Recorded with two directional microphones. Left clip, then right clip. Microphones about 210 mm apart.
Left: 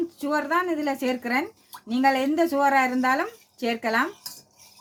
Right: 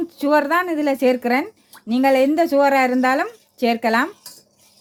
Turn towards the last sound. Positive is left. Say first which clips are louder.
# right 6 dB
turn(degrees=-35)  # may be behind; listen again after turning